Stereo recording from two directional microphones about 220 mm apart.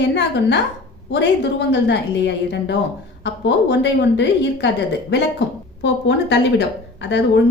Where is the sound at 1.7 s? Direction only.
50° left (ahead or behind).